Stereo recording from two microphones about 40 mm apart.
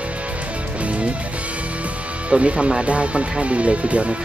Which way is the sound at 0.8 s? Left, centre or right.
Right.